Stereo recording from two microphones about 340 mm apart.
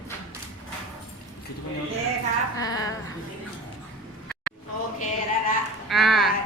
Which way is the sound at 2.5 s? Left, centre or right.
Centre.